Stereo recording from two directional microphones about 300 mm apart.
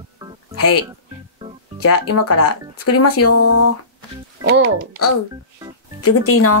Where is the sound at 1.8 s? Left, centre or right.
Left.